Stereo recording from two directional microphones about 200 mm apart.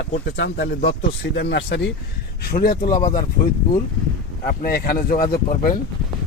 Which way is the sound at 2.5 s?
50° left (ahead or behind).